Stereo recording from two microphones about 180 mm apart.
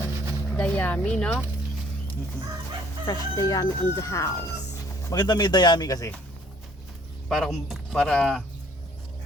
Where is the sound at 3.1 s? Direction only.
20° left (ahead or behind).